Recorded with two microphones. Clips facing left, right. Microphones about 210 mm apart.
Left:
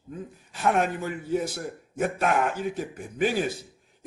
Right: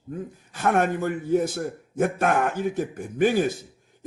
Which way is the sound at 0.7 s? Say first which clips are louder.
Right 7 dB; 50° right (ahead or behind).